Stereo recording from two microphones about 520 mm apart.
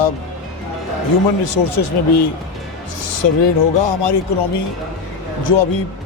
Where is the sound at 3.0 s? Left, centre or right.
Left.